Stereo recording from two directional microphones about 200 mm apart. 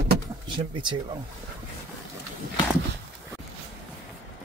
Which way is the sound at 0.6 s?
25° right (ahead or behind).